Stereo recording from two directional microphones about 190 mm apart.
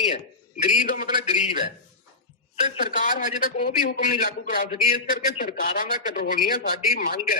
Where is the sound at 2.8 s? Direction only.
45° left (ahead or behind).